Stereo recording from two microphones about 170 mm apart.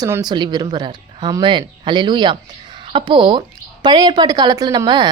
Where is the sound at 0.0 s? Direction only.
20° right (ahead or behind).